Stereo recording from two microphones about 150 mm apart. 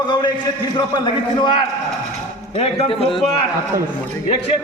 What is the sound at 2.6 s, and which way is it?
Speech, 40° left (ahead or behind).